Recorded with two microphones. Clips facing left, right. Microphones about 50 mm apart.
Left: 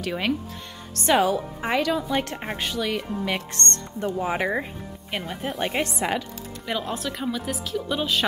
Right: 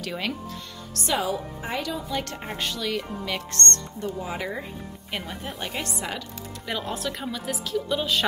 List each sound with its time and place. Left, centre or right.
0.0 s speech: centre
0.9 s speech: left
1.7 s speech: left
2.2 s speech: left
4.0 s speech: left
5.1 s speech: centre
5.6 s speech: left
6.6 s speech: centre